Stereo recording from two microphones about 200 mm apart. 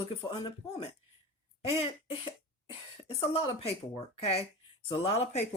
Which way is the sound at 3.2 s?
30° left (ahead or behind).